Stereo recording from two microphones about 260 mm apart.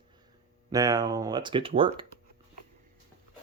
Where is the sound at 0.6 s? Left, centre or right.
Centre.